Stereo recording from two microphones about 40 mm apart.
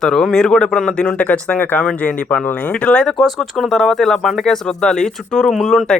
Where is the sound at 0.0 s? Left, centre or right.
Centre.